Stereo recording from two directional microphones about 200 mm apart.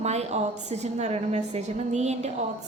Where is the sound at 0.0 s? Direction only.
35° right (ahead or behind).